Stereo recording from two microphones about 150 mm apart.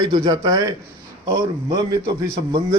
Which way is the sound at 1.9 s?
30° right (ahead or behind).